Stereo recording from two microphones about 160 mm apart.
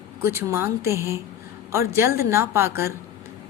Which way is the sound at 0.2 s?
15° right (ahead or behind).